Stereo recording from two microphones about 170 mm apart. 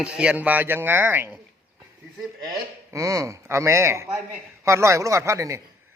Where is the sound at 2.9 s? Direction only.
20° right (ahead or behind).